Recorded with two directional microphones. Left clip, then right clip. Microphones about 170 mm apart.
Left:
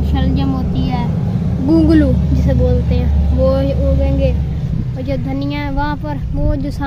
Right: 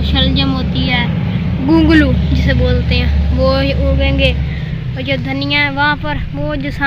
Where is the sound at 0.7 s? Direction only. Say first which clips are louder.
Right 6 dB; 15° left (ahead or behind).